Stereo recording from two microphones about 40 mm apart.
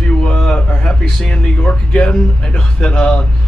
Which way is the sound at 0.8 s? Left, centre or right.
Left.